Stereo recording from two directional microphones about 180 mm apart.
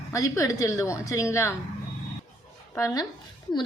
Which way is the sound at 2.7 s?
20° left (ahead or behind).